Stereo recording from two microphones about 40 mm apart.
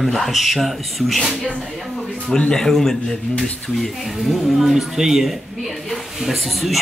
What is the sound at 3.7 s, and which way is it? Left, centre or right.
Speech, centre.